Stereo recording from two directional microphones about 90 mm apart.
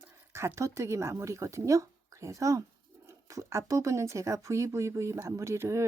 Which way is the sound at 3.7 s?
35° right (ahead or behind).